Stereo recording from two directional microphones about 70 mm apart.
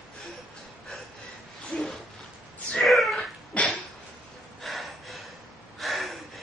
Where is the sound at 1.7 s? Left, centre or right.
Centre.